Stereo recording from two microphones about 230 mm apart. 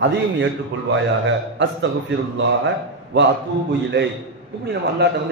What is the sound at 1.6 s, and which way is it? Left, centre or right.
Speech, right.